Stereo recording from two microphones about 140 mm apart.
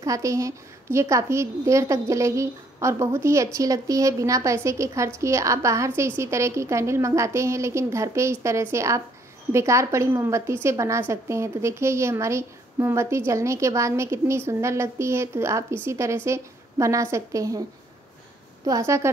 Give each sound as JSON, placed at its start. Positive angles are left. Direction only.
{"t": 0.0, "sound": "a woman's voice", "side_deg": -25}
{"t": 18.7, "sound": "a woman's voice", "side_deg": -20}